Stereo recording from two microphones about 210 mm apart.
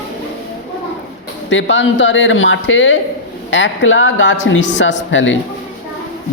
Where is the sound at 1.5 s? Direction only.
60° left (ahead or behind).